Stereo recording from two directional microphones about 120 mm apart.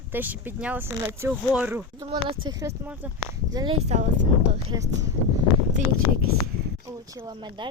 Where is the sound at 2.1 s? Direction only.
40° right (ahead or behind).